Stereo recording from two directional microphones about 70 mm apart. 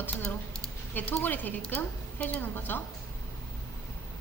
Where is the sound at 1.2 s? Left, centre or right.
Left.